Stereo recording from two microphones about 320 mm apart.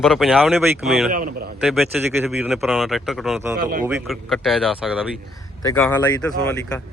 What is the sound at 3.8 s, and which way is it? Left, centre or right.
Speech, centre.